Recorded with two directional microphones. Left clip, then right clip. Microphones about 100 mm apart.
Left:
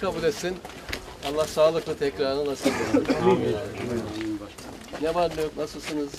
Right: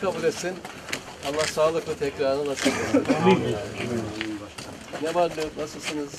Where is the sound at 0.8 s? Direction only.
5° right (ahead or behind).